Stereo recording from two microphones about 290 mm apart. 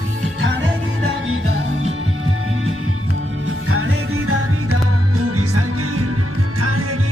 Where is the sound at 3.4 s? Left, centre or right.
Right.